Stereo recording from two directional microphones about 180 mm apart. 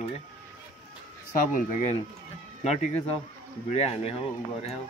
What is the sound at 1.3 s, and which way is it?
Speech, 45° left (ahead or behind).